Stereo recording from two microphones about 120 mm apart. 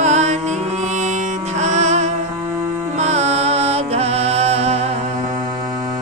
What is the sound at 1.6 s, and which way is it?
Music, 75° right (ahead or behind).